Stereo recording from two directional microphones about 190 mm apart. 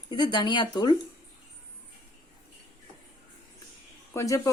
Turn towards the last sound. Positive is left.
turn(degrees=15)  # may be behind; listen again after turning